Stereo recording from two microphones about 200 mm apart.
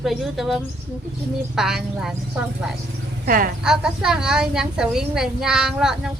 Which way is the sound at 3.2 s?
45° right (ahead or behind).